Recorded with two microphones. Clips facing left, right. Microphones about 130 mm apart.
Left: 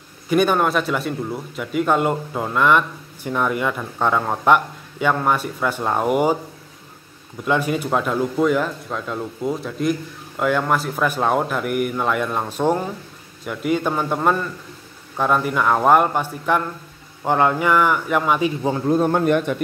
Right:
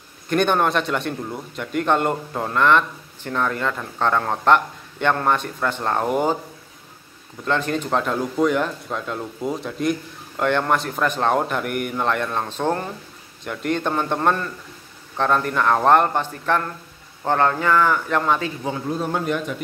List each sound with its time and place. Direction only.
0.3 s speech: 5° left (ahead or behind)
7.4 s speech: 10° left (ahead or behind)
18.9 s a man's voice: 50° left (ahead or behind)